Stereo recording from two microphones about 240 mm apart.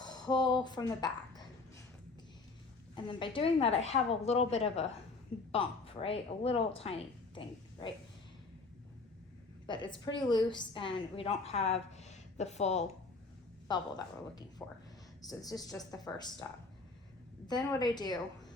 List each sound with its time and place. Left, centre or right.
0.0 s speech: centre
2.9 s a woman's voice: centre
9.6 s a woman's voice: centre
13.7 s a woman's voice: centre